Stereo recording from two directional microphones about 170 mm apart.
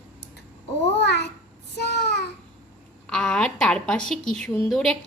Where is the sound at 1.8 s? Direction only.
75° left (ahead or behind).